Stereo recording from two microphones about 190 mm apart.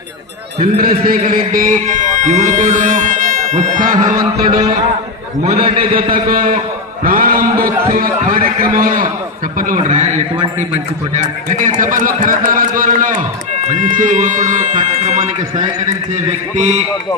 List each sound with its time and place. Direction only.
0.8 s speech: 50° right (ahead or behind)
5.4 s speech: 40° right (ahead or behind)
5.7 s a man's voice: 25° right (ahead or behind)
6.1 s a man's voice: 45° right (ahead or behind)
7.0 s mantra: 50° right (ahead or behind)
7.9 s a man's voice: 45° right (ahead or behind)
16.6 s speech: 35° right (ahead or behind)